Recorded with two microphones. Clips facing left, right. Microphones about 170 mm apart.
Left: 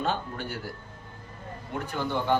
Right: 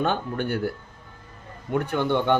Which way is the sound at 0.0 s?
60° right (ahead or behind).